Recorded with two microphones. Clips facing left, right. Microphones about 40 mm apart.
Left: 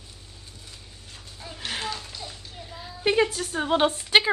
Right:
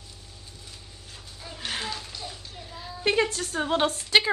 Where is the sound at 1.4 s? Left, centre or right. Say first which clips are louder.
Left 1 dB; centre.